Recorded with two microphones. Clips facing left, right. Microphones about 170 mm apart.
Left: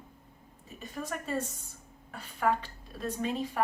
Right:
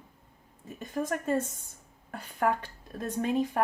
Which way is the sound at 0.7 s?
50° right (ahead or behind).